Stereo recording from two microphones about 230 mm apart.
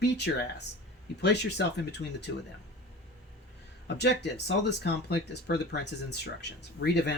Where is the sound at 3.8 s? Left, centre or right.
Left.